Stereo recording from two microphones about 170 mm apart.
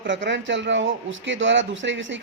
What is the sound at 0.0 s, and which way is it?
Speech, 90° right.